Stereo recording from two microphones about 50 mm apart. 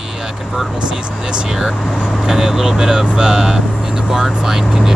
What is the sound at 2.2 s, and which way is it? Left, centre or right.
Speech, centre.